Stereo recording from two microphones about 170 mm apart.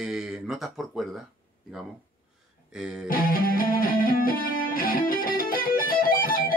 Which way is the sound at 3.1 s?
55° left (ahead or behind).